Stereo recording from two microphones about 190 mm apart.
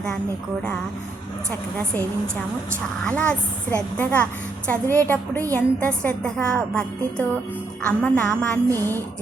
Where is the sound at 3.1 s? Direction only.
5° left (ahead or behind).